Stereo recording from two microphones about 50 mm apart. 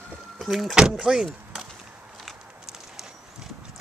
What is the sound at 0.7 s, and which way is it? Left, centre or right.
Speech, centre.